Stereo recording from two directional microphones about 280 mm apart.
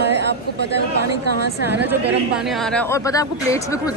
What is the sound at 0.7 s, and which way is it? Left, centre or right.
Speech, right.